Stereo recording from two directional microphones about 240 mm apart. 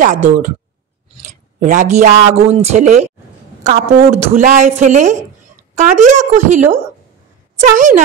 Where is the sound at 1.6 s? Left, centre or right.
Right.